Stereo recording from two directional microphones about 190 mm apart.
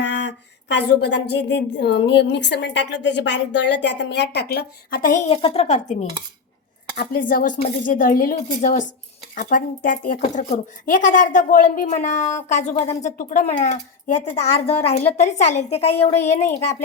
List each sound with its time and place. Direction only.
0.0 s a woman's voice: 70° left (ahead or behind); by 5.4 s 45° left (ahead or behind)
5.4 s a woman's voice: 30° left (ahead or behind)
6.9 s a woman's voice: 50° left (ahead or behind)